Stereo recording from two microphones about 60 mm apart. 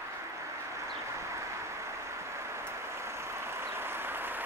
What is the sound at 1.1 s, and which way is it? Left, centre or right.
Vehicle, right.